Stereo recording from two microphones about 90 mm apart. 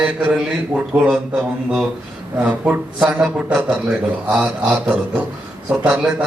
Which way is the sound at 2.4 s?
15° right (ahead or behind).